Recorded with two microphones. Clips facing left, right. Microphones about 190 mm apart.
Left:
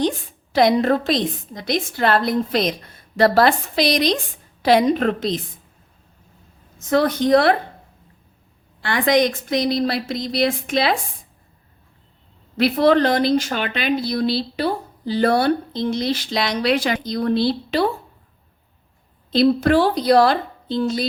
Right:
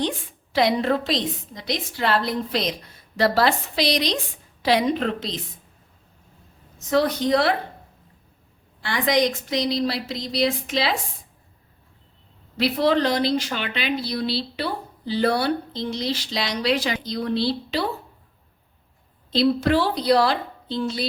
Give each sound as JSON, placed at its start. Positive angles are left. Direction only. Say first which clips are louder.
{"t": 0.5, "sound": "speech", "louder": "left 4 dB", "side_deg": 45}
{"t": 6.7, "sound": "speech", "louder": "left 3 dB", "side_deg": 50}
{"t": 8.8, "sound": "speech", "louder": "left 4 dB", "side_deg": 55}
{"t": 12.5, "sound": "speech", "louder": "left 5 dB", "side_deg": 50}
{"t": 19.3, "sound": "speech", "louder": "left 4 dB", "side_deg": 50}